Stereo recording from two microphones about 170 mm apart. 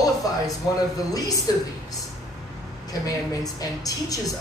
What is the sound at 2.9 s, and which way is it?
Speech, 20° left (ahead or behind).